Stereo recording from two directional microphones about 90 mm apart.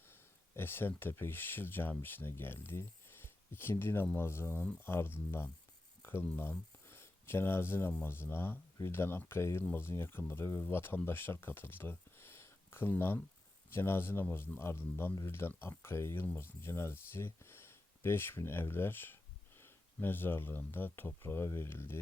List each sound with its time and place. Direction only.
0.0 s speech: 25° left (ahead or behind)